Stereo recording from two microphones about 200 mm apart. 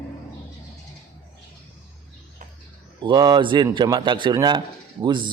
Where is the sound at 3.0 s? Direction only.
20° right (ahead or behind).